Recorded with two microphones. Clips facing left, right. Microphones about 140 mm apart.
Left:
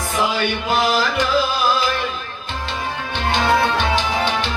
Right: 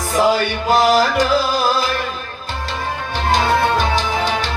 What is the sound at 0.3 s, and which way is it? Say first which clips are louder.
Music: right 4 dB; 40° right (ahead or behind).